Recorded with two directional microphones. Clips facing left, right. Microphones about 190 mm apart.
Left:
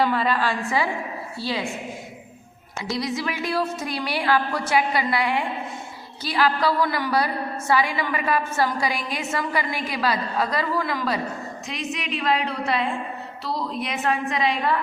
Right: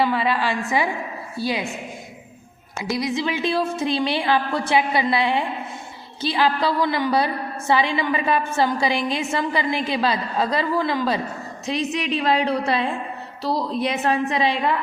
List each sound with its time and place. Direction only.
0.0 s a woman's voice: 10° right (ahead or behind)
2.8 s a woman's voice: 20° right (ahead or behind)